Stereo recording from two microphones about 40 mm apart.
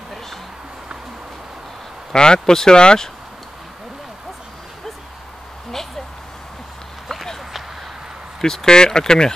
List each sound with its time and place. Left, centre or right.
2.1 s speech: centre
5.7 s a sound: centre
8.4 s speech: centre